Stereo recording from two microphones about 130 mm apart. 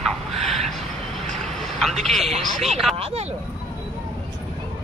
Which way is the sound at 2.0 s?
Centre (ahead or behind).